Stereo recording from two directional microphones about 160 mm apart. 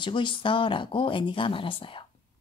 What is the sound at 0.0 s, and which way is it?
Speech, 30° left (ahead or behind).